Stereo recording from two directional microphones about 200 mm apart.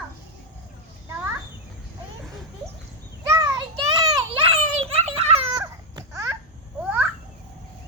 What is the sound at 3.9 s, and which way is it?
Children playing, 20° right (ahead or behind).